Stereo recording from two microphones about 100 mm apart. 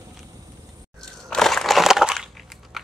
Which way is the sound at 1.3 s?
5° left (ahead or behind).